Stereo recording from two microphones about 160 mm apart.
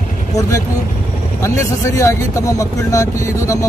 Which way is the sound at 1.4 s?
20° left (ahead or behind).